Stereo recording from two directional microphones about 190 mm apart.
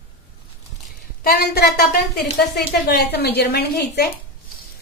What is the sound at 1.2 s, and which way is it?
A woman's voice, 55° left (ahead or behind).